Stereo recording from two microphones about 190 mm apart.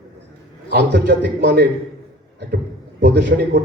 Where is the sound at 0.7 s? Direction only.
60° right (ahead or behind).